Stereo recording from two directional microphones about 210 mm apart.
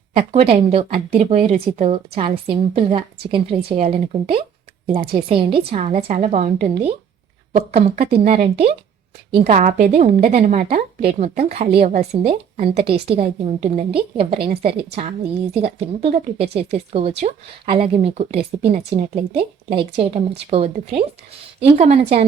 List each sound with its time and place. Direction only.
0.1 s a woman's voice: 25° right (ahead or behind)
7.8 s a woman's voice: 30° right (ahead or behind)
10.1 s a woman's voice: 45° right (ahead or behind)
10.3 s a woman's voice: 35° right (ahead or behind)